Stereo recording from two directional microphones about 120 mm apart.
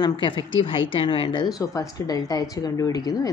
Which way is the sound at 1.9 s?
30° left (ahead or behind).